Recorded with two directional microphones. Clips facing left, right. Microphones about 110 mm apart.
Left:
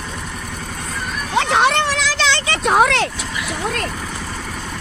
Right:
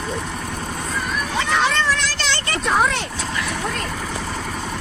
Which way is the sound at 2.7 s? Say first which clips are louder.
Left 5 dB; 70° left (ahead or behind).